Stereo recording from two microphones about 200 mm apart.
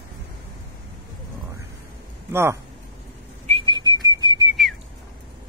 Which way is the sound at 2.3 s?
10° right (ahead or behind).